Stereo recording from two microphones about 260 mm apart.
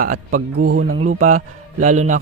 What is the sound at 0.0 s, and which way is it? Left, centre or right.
Speech, right.